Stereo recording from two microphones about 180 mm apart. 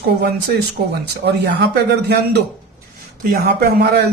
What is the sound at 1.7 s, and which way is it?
Speech, 70° right (ahead or behind).